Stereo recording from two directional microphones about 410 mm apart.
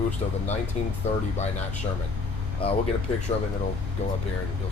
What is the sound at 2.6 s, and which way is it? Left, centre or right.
Speech, centre.